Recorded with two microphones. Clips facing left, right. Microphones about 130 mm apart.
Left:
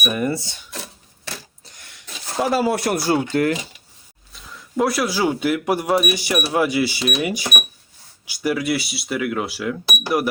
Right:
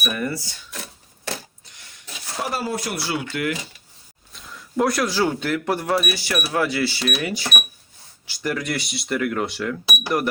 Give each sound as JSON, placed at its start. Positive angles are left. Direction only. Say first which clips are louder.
{"t": 0.0, "sound": "speech", "louder": "left 4 dB", "side_deg": 20}
{"t": 2.6, "sound": "speech", "louder": "left 7 dB", "side_deg": 70}
{"t": 2.9, "sound": "speech", "louder": "left 8 dB", "side_deg": 45}
{"t": 4.3, "sound": "speech", "louder": "even", "side_deg": 0}